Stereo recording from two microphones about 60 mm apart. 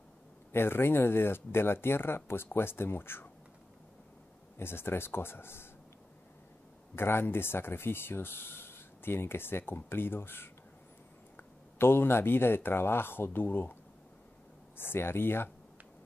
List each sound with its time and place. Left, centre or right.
0.5 s speech: left
4.6 s speech: left
7.0 s speech: left
14.8 s speech: left